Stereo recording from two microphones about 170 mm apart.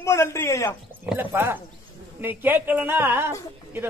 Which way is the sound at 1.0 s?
10° right (ahead or behind).